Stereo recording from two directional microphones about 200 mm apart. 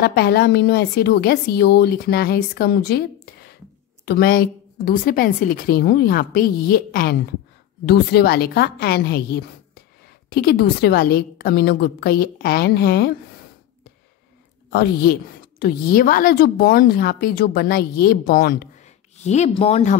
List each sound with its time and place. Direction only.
0.0 s a woman's voice: 55° left (ahead or behind)
14.7 s a woman's voice: 55° left (ahead or behind)
19.1 s speech: 35° left (ahead or behind)